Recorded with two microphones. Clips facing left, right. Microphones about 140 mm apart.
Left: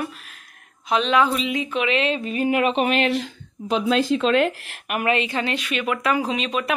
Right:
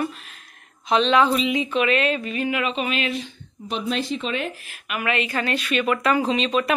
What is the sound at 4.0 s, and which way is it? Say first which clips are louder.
Speech: left 8 dB; 90° left.